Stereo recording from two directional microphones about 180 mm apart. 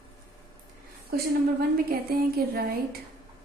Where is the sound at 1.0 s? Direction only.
55° right (ahead or behind).